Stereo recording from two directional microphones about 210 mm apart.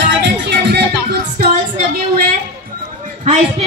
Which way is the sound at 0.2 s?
50° right (ahead or behind).